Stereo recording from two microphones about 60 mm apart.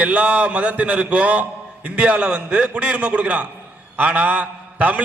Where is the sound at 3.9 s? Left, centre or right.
Right.